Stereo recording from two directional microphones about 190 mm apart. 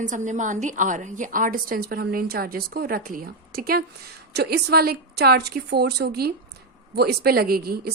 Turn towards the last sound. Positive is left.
turn(degrees=-55)  # may be behind; listen again after turning